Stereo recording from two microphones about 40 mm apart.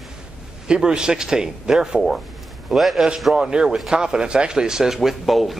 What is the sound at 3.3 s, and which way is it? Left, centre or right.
Speech, right.